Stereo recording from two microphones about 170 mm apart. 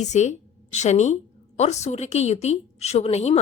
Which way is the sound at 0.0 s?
40° left (ahead or behind).